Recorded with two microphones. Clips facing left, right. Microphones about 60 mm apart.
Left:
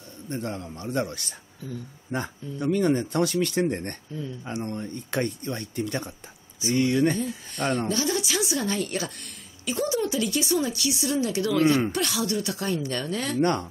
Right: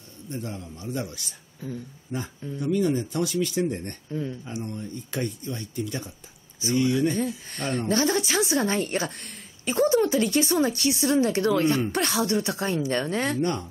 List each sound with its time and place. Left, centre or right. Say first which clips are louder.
0.3 s speech: left 3 dB; left
7.9 s a woman's voice: right 3 dB; right
13.4 s speech: left 3 dB; left